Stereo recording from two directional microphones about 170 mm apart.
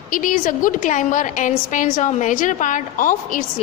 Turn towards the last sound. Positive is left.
turn(degrees=50)  # may be behind; listen again after turning